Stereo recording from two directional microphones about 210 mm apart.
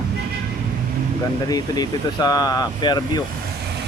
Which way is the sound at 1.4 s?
20° left (ahead or behind).